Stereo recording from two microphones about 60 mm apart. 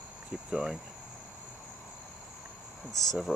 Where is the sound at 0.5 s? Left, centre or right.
Centre.